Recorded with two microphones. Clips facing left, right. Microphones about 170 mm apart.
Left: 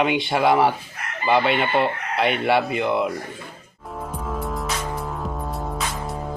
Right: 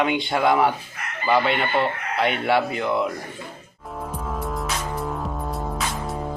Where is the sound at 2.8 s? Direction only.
15° left (ahead or behind).